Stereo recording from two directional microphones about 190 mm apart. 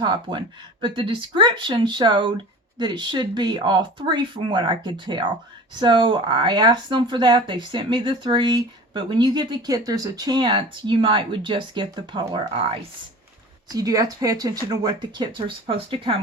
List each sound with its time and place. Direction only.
0.0 s speech: 25° right (ahead or behind)